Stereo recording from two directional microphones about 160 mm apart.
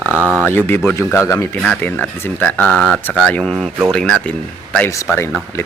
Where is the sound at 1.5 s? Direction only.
5° left (ahead or behind).